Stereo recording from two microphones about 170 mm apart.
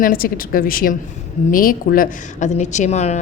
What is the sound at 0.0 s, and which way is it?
A woman's voice, 55° left (ahead or behind).